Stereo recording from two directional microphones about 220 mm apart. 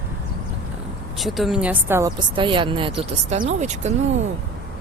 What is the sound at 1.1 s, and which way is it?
Speech, centre (ahead or behind).